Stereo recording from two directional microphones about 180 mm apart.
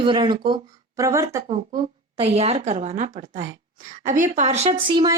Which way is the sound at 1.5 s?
30° right (ahead or behind).